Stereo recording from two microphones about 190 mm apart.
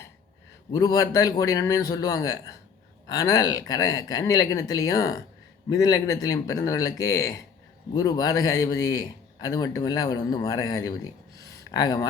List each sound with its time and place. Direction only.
0.7 s a man's voice: 20° left (ahead or behind)